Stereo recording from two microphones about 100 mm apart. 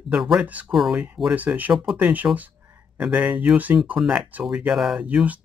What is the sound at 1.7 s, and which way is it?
Speech, 5° right (ahead or behind).